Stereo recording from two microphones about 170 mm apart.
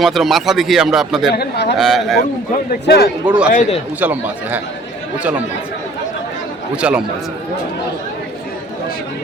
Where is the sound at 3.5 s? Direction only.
45° left (ahead or behind).